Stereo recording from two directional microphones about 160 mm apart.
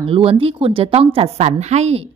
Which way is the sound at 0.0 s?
35° right (ahead or behind).